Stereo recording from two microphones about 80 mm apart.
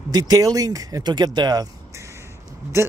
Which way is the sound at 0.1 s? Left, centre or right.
Right.